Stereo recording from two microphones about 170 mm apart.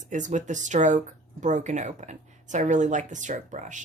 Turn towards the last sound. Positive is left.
turn(degrees=-45)  # may be behind; listen again after turning